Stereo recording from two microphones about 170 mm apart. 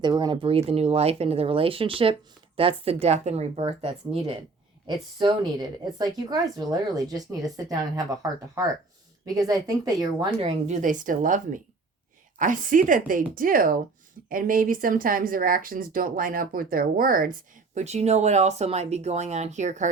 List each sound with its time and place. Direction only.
0.0 s speech: 25° right (ahead or behind)
4.9 s a woman's voice: 25° right (ahead or behind)
10.4 s speech: 45° right (ahead or behind)
17.7 s speech: 40° right (ahead or behind)